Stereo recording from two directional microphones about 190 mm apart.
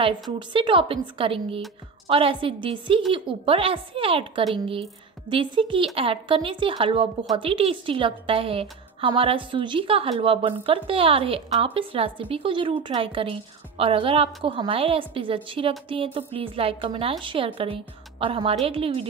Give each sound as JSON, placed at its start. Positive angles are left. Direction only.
{"t": 0.4, "sound": "a woman's voice", "side_deg": -25}